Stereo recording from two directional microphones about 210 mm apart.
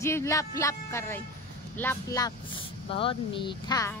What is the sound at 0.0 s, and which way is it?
Speech, 15° left (ahead or behind).